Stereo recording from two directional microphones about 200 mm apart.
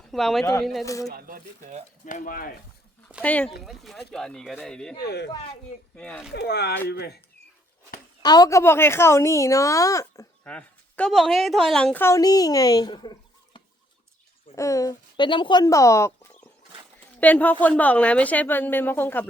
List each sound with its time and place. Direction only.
0.1 s speech: centre (ahead or behind)
1.1 s speech: 40° right (ahead or behind)
2.0 s speech: 40° left (ahead or behind)
3.2 s a woman's voice: 5° left (ahead or behind)
4.9 s speech: 55° left (ahead or behind)
6.0 s speech: 5° left (ahead or behind)
6.3 s speech: 55° left (ahead or behind)
8.2 s a woman's voice: 20° left (ahead or behind)